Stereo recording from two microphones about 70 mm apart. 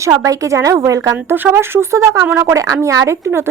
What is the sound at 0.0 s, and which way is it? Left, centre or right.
A woman's voice, right.